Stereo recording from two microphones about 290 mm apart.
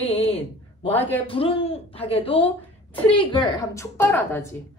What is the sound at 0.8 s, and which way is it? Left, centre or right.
Speech, centre.